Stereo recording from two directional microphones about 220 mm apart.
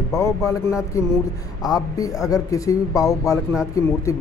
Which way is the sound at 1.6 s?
15° left (ahead or behind).